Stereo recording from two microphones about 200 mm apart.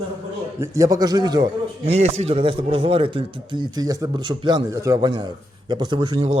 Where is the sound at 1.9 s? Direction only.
35° right (ahead or behind).